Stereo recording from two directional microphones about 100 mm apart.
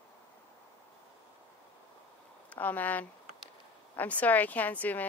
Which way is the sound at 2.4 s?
15° left (ahead or behind).